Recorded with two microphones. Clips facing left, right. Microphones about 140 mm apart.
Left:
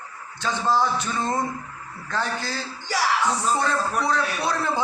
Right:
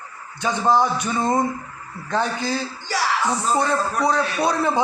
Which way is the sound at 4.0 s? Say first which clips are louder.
Right 4 dB; 20° right (ahead or behind).